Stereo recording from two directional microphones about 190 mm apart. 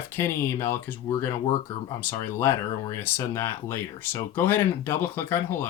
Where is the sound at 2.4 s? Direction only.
15° left (ahead or behind).